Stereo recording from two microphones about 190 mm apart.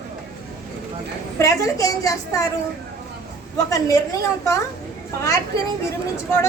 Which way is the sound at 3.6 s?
15° left (ahead or behind).